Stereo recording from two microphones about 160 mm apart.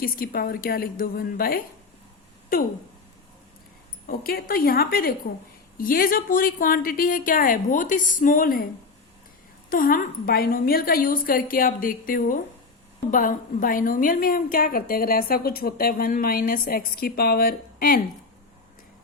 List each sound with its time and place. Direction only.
0.0 s a woman's voice: 65° left (ahead or behind)
4.0 s a woman's voice: 70° left (ahead or behind)
9.6 s a woman's voice: 60° left (ahead or behind)